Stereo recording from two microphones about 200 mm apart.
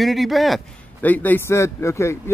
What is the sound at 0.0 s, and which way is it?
A man's voice, centre (ahead or behind).